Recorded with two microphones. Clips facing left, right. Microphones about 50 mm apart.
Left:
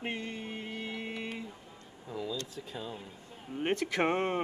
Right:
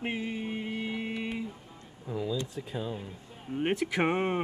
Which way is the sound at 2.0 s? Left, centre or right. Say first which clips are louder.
Right 5 dB; centre.